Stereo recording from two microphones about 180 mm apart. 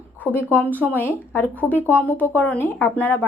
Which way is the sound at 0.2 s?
10° left (ahead or behind).